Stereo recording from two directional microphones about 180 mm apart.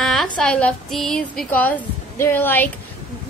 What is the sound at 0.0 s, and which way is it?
A woman's voice, centre (ahead or behind).